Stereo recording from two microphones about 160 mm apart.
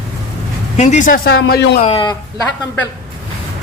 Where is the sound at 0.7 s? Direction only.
45° left (ahead or behind); by 1.8 s 85° left.